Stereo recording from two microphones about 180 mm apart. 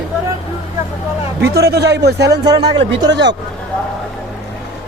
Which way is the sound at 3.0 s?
80° right.